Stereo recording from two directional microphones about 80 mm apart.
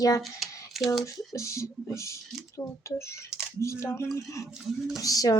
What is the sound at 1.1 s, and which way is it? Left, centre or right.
Speech, left.